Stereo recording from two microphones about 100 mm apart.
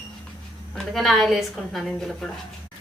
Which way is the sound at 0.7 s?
5° left (ahead or behind).